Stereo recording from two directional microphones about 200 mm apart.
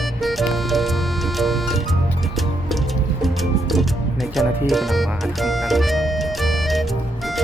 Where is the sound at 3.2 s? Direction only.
Centre (ahead or behind).